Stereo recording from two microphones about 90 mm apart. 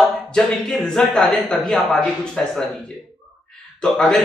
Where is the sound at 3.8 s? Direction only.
10° left (ahead or behind).